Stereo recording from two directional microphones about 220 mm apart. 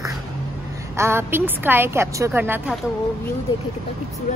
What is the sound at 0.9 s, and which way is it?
A woman's voice, 10° right (ahead or behind).